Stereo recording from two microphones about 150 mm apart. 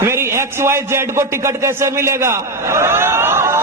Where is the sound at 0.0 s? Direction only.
15° right (ahead or behind).